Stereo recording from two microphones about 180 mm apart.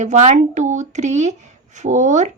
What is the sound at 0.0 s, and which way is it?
A woman's voice, 40° right (ahead or behind).